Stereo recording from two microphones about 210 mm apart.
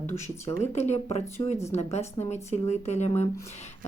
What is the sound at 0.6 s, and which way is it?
Speech, 30° left (ahead or behind).